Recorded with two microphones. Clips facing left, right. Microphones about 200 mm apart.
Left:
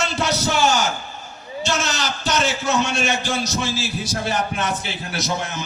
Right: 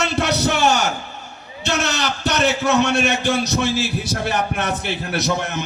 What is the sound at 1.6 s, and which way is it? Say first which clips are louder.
A man's voice: right 2 dB; 60° right (ahead or behind).